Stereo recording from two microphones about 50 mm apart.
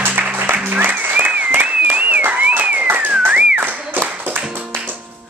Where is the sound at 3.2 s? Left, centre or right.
Right.